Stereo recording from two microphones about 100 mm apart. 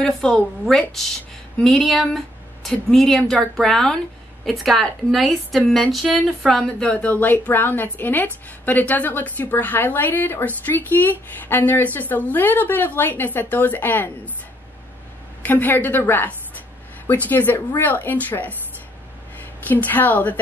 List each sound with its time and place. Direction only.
0.0 s a woman's voice: 5° left (ahead or behind); by 14.3 s 20° left (ahead or behind)
15.4 s a woman's voice: 20° left (ahead or behind)
19.7 s speech: 15° left (ahead or behind)